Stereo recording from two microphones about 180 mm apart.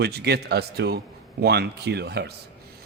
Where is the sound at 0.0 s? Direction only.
65° right (ahead or behind).